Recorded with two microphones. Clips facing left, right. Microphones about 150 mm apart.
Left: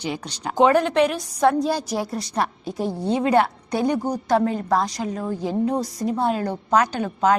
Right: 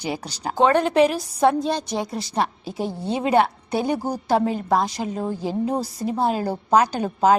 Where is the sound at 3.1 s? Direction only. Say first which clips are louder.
Right 1 dB; 20° right (ahead or behind).